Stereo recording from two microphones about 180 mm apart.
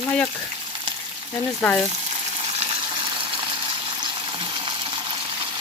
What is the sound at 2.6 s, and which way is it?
Water, 30° right (ahead or behind).